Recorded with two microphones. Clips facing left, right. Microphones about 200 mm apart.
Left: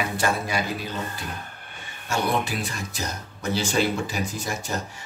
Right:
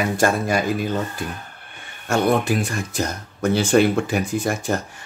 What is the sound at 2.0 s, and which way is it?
Speech, 50° right (ahead or behind).